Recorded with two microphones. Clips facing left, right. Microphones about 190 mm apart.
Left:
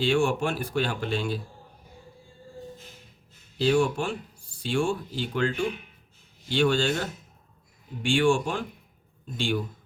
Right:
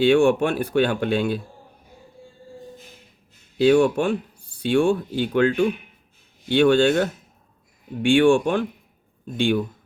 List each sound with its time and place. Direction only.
0.0 s speech: 60° right (ahead or behind)
3.6 s speech: 60° right (ahead or behind)